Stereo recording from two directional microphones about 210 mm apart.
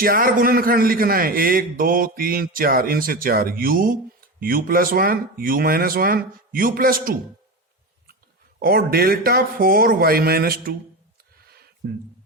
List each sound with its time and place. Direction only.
0.0 s a man's voice: 45° right (ahead or behind)
8.5 s a man's voice: 45° right (ahead or behind)
11.4 s a sound: 45° right (ahead or behind)